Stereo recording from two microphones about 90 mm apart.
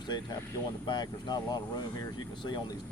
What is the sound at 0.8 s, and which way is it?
Speech, 55° left (ahead or behind).